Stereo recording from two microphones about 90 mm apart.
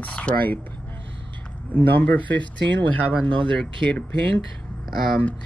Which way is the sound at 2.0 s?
15° left (ahead or behind).